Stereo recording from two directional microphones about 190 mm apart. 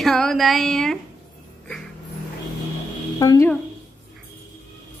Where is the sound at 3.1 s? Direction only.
20° left (ahead or behind).